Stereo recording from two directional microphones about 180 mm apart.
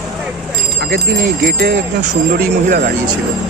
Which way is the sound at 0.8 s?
70° right (ahead or behind).